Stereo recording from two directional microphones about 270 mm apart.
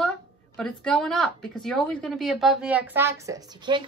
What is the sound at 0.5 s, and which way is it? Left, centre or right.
A woman's voice, centre.